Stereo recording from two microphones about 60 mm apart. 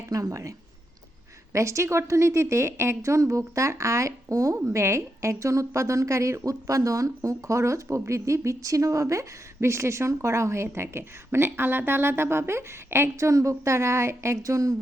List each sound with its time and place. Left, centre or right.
0.1 s a woman's voice: right
1.5 s a woman's voice: right
4.7 s a woman's voice: right